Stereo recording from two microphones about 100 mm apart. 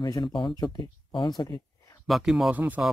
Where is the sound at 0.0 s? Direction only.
45° left (ahead or behind).